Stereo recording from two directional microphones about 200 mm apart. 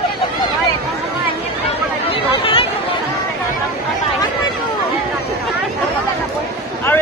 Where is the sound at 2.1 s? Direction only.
25° left (ahead or behind).